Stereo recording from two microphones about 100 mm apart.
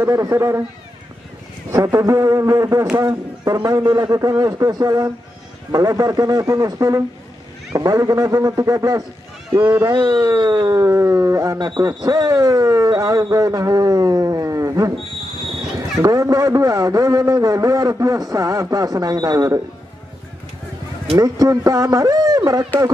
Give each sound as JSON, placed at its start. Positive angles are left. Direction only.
{"t": 0.0, "sound": "a man's voice", "side_deg": -30}
{"t": 1.7, "sound": "a man's voice", "side_deg": -30}
{"t": 9.5, "sound": "a man's voice", "side_deg": -20}
{"t": 9.8, "sound": "a man's voice", "side_deg": -50}
{"t": 11.5, "sound": "a man's voice", "side_deg": -45}
{"t": 16.0, "sound": "a man's voice", "side_deg": -35}
{"t": 21.2, "sound": "a man's voice", "side_deg": -35}